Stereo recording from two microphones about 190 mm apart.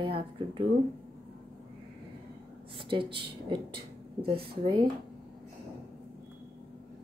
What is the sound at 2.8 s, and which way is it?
Speech, 25° right (ahead or behind).